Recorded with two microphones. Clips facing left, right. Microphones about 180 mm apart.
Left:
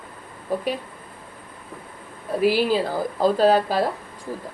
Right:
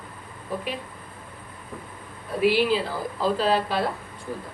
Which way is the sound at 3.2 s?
40° left (ahead or behind).